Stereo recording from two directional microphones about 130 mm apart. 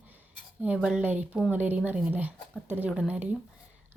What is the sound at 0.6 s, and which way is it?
Speech, 10° right (ahead or behind).